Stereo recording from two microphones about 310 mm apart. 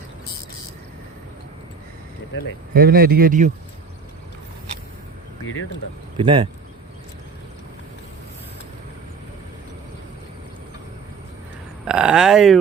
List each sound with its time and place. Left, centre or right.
2.7 s speech: right
6.1 s speech: centre
11.9 s speech: centre